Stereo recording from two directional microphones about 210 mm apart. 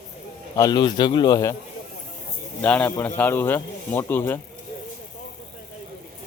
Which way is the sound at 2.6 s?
5° left (ahead or behind).